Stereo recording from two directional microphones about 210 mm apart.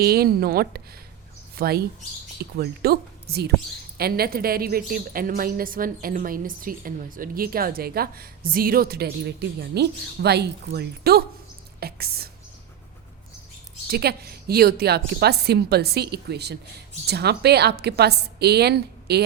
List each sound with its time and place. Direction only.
0.0 s a woman's voice: 45° right (ahead or behind)
13.9 s a woman's voice: 50° right (ahead or behind)